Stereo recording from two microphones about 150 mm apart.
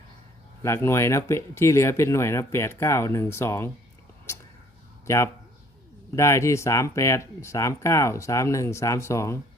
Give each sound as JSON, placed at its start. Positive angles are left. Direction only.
{"t": 0.6, "sound": "speech", "side_deg": 20}
{"t": 4.3, "sound": "a sound", "side_deg": 20}
{"t": 5.0, "sound": "speech", "side_deg": 20}